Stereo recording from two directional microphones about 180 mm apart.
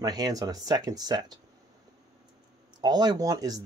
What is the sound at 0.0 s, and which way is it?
Speech, 20° right (ahead or behind).